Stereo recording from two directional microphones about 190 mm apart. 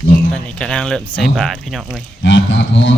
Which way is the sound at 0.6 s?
5° left (ahead or behind).